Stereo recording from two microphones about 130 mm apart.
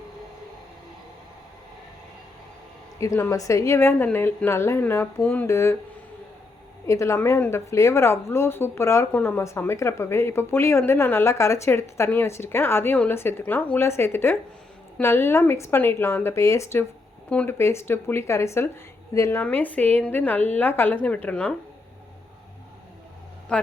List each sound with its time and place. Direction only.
3.0 s a woman's voice: 25° left (ahead or behind)
5.5 s a woman's voice: 20° left (ahead or behind)
6.8 s a woman's voice: 25° left (ahead or behind)
17.2 s speech: 10° left (ahead or behind)
17.6 s a woman's voice: 20° left (ahead or behind)
23.5 s a woman's voice: 5° left (ahead or behind)